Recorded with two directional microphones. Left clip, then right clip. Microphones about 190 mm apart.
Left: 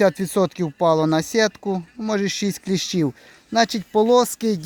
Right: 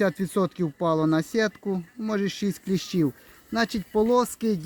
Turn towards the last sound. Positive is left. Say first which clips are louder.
# left 5 dB
turn(degrees=50)  # may be behind; listen again after turning